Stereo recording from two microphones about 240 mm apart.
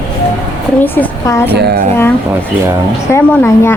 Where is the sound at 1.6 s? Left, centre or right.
Right.